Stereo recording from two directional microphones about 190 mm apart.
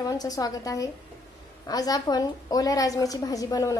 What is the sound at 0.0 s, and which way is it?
A woman's voice, 20° left (ahead or behind).